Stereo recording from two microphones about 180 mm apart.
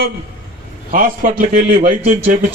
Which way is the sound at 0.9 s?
50° right (ahead or behind).